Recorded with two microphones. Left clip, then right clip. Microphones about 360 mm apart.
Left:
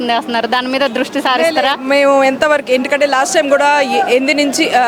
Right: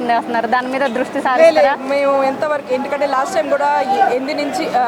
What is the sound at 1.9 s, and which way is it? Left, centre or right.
Speech, left.